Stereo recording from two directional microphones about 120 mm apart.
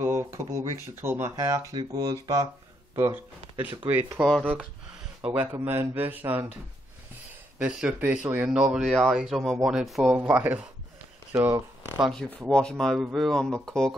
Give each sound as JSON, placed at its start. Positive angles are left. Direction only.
{"t": 0.0, "sound": "speech", "side_deg": -20}
{"t": 3.8, "sound": "speech", "side_deg": -15}
{"t": 4.4, "sound": "speech", "side_deg": -5}
{"t": 5.7, "sound": "speech", "side_deg": -15}
{"t": 7.5, "sound": "speech", "side_deg": -10}
{"t": 8.8, "sound": "speech", "side_deg": 5}
{"t": 10.1, "sound": "speech", "side_deg": -15}
{"t": 12.1, "sound": "speech", "side_deg": 5}